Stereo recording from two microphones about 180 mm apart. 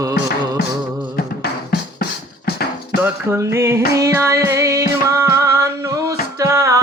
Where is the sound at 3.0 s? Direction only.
15° right (ahead or behind).